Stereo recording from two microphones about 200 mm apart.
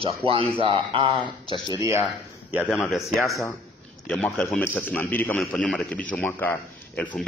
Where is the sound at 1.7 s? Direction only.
15° right (ahead or behind).